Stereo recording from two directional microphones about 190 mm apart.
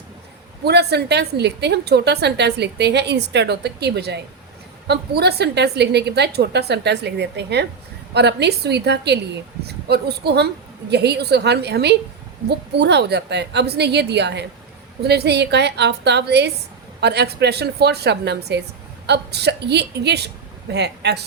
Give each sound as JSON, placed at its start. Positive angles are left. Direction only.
{"t": 0.6, "sound": "a woman's voice", "side_deg": -60}